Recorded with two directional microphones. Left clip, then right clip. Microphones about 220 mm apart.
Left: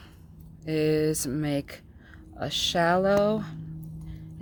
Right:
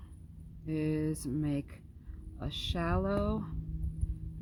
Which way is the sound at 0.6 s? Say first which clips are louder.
Left 10 dB; 25° left (ahead or behind).